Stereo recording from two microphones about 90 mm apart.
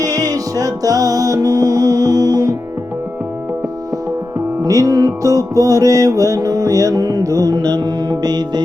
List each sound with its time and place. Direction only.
0.0 s music: 40° right (ahead or behind)
4.4 s music: 40° right (ahead or behind)